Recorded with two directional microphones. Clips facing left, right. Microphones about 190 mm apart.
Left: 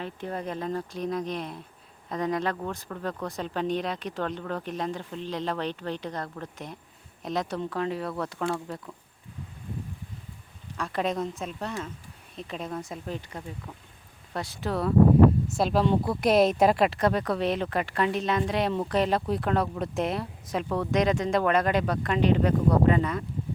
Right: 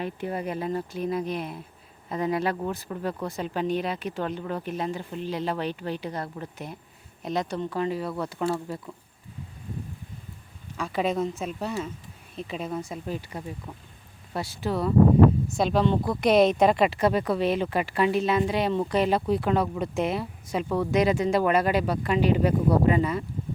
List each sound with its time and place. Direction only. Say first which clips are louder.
0.0 s speech: right 3 dB; 10° right (ahead or behind)
10.8 s speech: right 2 dB; 5° right (ahead or behind)